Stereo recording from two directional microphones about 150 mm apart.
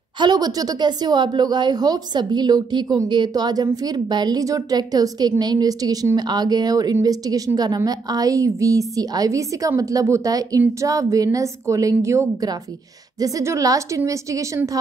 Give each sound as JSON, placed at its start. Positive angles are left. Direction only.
{"t": 0.2, "sound": "a woman's voice", "side_deg": -25}